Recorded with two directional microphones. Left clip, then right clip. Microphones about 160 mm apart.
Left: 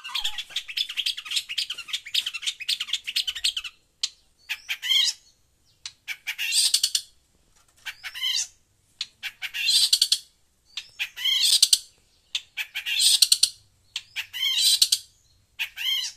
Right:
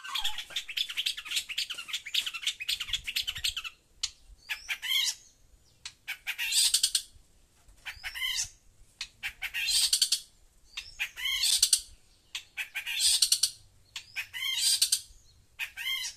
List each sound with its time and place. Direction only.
0.1 s bird: 20° right (ahead or behind)
7.8 s cat: centre (ahead or behind)
8.9 s bird: 5° right (ahead or behind)
10.7 s chicken: 5° right (ahead or behind)
12.3 s bird: centre (ahead or behind)
13.9 s crowing: centre (ahead or behind)
15.5 s bird: centre (ahead or behind)